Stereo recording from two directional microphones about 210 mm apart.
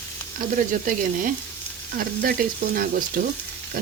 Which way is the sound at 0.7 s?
40° right (ahead or behind).